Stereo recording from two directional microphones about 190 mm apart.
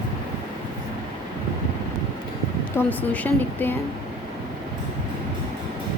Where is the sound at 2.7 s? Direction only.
10° left (ahead or behind).